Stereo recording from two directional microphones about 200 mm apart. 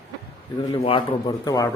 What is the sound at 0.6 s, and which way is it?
A man's voice, 25° left (ahead or behind).